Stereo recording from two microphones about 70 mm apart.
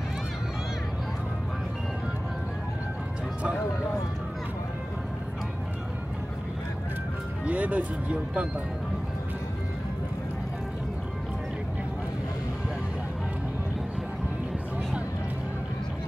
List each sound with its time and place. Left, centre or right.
7.4 s speech: right